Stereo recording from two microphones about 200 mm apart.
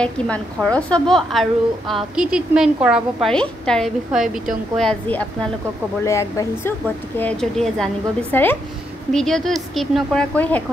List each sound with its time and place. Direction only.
0.0 s a woman's voice: 5° left (ahead or behind)
7.2 s a woman's voice: 5° left (ahead or behind)